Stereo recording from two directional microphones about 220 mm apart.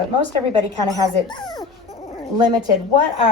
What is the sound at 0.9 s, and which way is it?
Speech, 15° right (ahead or behind).